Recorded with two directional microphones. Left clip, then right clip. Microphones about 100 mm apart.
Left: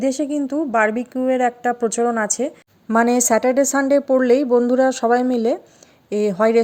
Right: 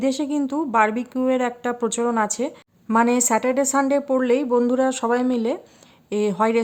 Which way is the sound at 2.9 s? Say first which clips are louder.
Left 3 dB; 45° left (ahead or behind).